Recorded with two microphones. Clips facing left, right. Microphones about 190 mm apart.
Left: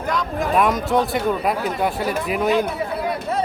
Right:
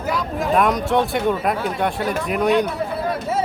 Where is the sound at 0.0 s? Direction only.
5° right (ahead or behind).